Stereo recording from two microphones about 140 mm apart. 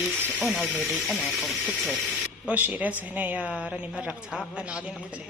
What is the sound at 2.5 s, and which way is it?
Speech, 10° right (ahead or behind).